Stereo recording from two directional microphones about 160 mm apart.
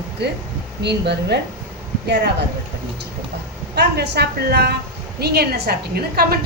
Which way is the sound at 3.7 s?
90° right.